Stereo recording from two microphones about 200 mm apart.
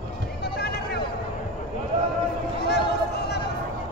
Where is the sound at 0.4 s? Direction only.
55° left (ahead or behind).